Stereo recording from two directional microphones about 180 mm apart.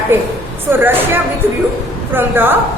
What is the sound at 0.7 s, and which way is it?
A woman's voice, 10° right (ahead or behind).